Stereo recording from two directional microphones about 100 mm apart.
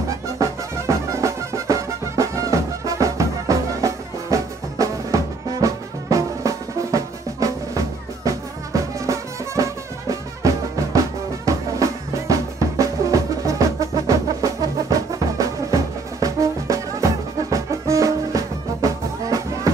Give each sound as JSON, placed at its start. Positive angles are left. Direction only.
{"t": 0.4, "sound": "music", "side_deg": -30}
{"t": 11.4, "sound": "drum", "side_deg": -35}
{"t": 13.5, "sound": "music", "side_deg": -35}